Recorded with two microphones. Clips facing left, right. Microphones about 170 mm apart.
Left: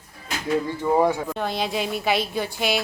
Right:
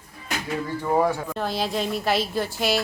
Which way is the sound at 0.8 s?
20° left (ahead or behind).